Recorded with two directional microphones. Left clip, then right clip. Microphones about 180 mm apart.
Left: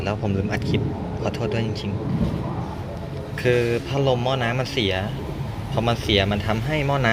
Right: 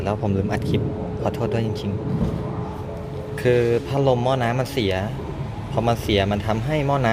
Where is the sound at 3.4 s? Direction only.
15° right (ahead or behind).